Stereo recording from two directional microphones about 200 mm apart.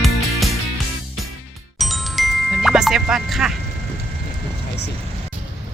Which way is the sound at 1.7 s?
Centre (ahead or behind).